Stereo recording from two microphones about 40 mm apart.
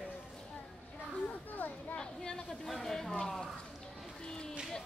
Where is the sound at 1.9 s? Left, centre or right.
Centre.